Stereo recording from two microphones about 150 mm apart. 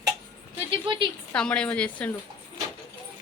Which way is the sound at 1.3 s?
5° left (ahead or behind).